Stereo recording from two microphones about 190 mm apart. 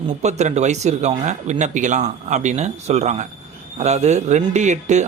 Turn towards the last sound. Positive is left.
turn(degrees=-40)  # may be behind; listen again after turning